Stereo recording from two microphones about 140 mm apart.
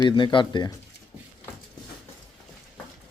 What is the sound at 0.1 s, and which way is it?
Speech, 35° left (ahead or behind).